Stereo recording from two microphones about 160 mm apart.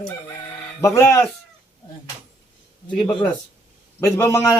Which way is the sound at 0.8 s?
15° left (ahead or behind).